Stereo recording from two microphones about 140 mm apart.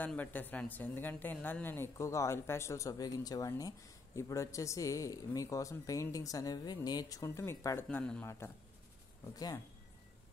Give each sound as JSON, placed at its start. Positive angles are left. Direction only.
{"t": 0.0, "sound": "speech", "side_deg": 10}
{"t": 8.0, "sound": "a man's voice", "side_deg": 5}
{"t": 9.2, "sound": "speech", "side_deg": 25}